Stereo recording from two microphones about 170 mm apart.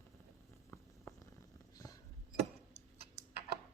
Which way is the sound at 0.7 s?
15° left (ahead or behind).